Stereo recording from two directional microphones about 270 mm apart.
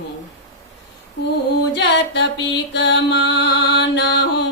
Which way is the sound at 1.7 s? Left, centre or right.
Left.